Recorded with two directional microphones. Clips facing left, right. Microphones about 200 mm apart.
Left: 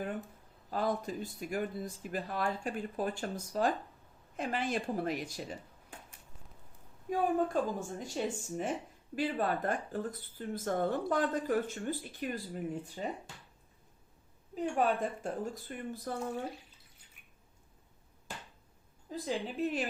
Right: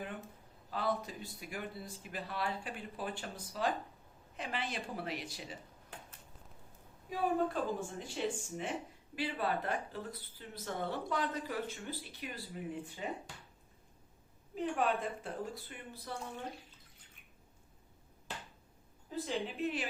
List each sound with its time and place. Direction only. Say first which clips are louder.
0.7 s speech: left 3 dB; 45° left (ahead or behind)
7.1 s speech: left 3 dB; 45° left (ahead or behind)
14.5 s speech: left 3 dB; 45° left (ahead or behind)
19.2 s a woman's voice: left 2 dB; 40° left (ahead or behind)